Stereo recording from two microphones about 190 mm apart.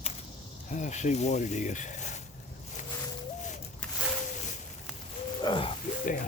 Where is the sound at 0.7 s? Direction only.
40° left (ahead or behind).